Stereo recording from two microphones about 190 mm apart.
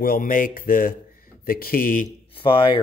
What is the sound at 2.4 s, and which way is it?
Speech, 25° left (ahead or behind).